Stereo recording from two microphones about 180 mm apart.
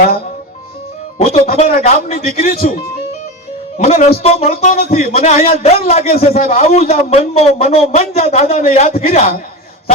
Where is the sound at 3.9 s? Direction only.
35° left (ahead or behind).